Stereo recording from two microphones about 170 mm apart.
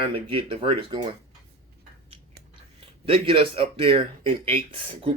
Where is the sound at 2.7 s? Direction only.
35° right (ahead or behind).